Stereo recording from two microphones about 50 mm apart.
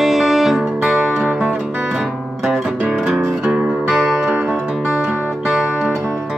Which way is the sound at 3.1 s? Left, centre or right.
Centre.